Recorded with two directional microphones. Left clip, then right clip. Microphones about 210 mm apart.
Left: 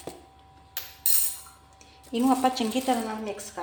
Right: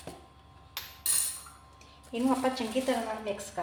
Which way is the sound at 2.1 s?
40° left (ahead or behind).